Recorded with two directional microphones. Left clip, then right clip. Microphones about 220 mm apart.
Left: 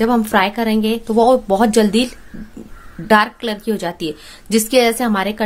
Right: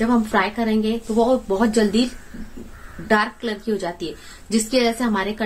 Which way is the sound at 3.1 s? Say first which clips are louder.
Left 6 dB; 40° left (ahead or behind).